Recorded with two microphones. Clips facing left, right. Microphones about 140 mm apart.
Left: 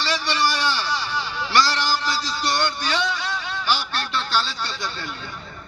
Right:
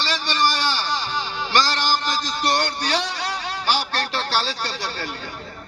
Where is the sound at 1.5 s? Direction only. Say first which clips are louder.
Even; 45° right (ahead or behind).